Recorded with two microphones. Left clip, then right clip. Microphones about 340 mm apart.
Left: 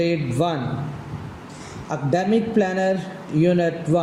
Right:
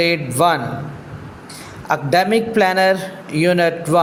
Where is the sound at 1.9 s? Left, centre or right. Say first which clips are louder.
Right 6 dB; right.